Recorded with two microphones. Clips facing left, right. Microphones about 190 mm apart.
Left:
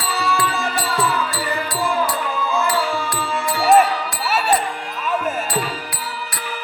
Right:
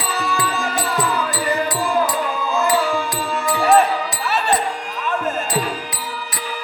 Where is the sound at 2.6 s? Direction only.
20° right (ahead or behind).